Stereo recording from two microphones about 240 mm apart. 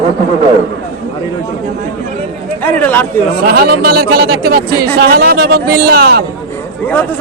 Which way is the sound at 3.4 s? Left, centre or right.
Right.